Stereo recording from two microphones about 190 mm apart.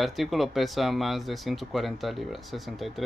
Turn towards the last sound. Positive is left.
turn(degrees=0)  # may be behind; listen again after turning